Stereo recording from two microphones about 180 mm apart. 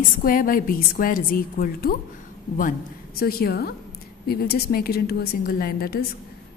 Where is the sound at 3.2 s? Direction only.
60° left (ahead or behind).